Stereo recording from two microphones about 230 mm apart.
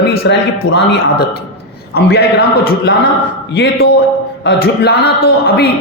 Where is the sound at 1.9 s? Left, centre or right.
Left.